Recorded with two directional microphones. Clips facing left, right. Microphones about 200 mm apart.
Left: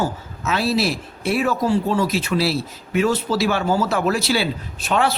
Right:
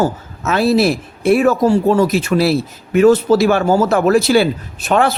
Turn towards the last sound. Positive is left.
turn(degrees=-50)  # may be behind; listen again after turning